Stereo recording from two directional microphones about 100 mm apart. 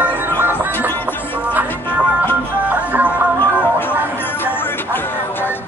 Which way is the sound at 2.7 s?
15° right (ahead or behind).